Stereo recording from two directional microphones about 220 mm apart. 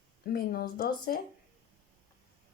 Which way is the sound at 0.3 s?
45° left (ahead or behind).